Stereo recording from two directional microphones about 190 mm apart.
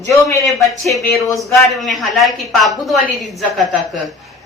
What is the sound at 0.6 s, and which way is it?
Speech, centre (ahead or behind).